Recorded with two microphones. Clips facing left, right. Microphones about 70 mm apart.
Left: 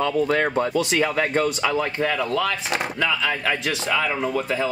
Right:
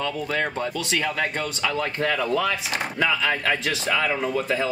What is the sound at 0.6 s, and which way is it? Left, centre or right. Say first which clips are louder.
Speech: left 6 dB; left.